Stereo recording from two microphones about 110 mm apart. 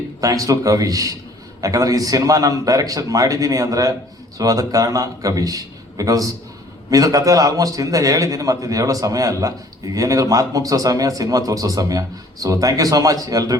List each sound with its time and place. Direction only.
0.2 s a man's voice: 30° right (ahead or behind)